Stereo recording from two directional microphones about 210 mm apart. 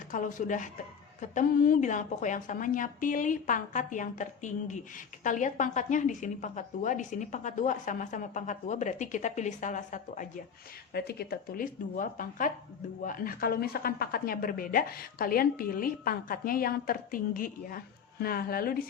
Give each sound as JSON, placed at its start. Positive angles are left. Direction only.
{"t": 0.1, "sound": "a woman's voice", "side_deg": 40}
{"t": 10.9, "sound": "a woman's voice", "side_deg": 50}